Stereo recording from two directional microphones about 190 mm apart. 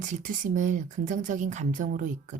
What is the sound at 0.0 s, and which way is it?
Speech, 45° right (ahead or behind).